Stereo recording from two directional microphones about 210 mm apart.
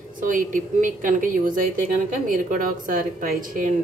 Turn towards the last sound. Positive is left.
turn(degrees=-40)  # may be behind; listen again after turning